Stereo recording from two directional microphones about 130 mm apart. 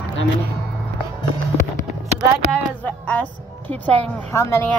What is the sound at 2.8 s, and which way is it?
A woman's voice, 10° left (ahead or behind).